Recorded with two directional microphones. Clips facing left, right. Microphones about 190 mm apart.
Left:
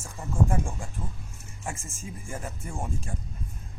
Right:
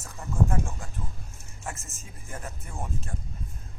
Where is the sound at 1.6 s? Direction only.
10° left (ahead or behind).